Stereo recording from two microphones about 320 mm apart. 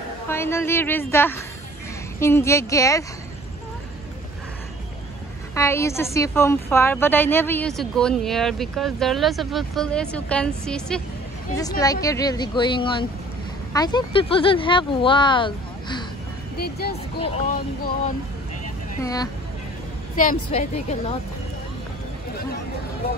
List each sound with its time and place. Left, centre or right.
0.3 s speech: centre
5.5 s a woman's voice: centre
16.5 s speech: left
18.9 s speech: centre
20.5 s speech: centre